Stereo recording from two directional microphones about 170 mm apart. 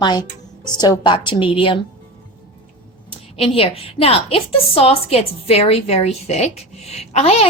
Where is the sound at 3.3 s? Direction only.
35° left (ahead or behind).